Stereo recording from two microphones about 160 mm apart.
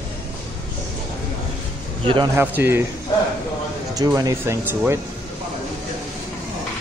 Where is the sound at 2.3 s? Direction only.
15° right (ahead or behind).